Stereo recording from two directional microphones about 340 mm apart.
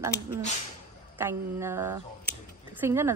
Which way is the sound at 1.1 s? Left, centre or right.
Centre.